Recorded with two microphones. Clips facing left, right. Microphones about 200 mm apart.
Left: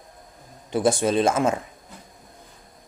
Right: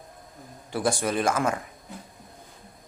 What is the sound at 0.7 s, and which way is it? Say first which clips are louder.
Speech: left 5 dB; 20° left (ahead or behind).